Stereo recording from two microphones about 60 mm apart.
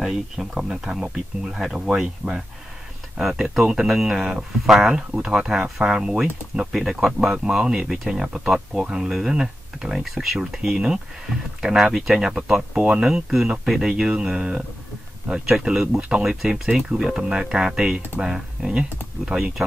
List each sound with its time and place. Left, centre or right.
0.0 s speech: centre
16.3 s speech: centre